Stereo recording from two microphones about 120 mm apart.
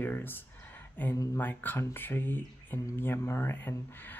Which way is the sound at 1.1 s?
30° left (ahead or behind).